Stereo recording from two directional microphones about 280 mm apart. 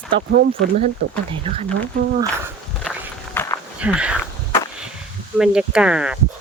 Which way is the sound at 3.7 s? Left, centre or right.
Centre.